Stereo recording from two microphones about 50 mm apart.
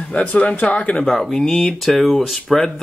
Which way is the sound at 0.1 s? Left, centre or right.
Left.